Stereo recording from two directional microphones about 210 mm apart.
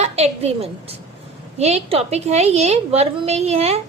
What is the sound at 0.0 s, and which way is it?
A woman's voice, 30° right (ahead or behind).